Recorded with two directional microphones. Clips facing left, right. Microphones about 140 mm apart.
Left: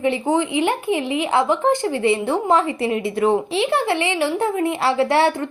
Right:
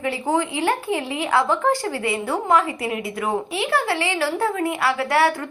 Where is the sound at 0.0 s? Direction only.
20° left (ahead or behind).